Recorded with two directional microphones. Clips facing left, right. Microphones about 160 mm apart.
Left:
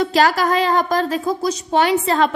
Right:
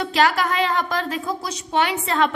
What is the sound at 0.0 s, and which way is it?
A woman's voice, 40° left (ahead or behind).